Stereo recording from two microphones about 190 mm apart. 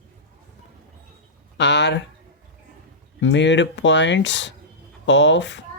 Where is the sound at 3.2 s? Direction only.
70° left (ahead or behind).